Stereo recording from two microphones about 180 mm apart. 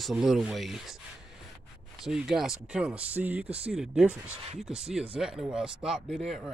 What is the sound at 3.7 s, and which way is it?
Speech, 5° right (ahead or behind).